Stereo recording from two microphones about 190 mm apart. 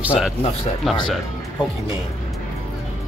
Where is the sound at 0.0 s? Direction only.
5° right (ahead or behind).